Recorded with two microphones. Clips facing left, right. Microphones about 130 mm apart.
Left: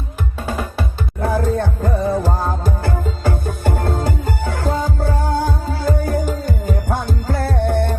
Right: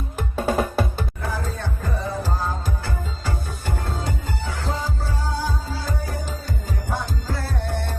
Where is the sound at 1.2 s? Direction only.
55° left (ahead or behind).